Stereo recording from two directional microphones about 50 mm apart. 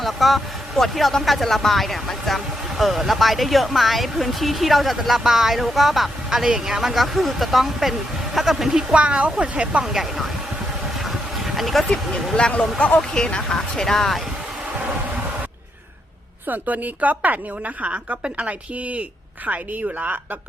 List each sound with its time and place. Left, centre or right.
0.0 s speech: centre
8.9 s a woman's voice: right
9.8 s speech: centre
10.9 s a sound: centre
12.4 s speech: centre
16.5 s a woman's voice: right